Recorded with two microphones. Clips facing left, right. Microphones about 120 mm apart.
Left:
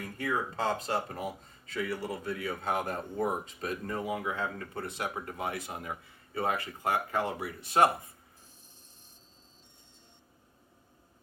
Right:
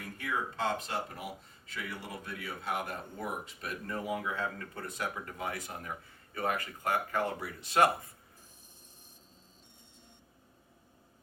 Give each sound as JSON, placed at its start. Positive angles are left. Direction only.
{"t": 0.2, "sound": "speech", "side_deg": 35}